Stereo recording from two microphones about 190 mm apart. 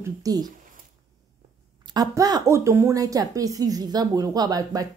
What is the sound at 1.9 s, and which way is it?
Speech, 20° right (ahead or behind).